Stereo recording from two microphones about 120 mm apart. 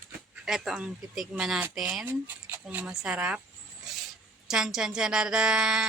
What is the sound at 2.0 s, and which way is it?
Speech, 20° right (ahead or behind).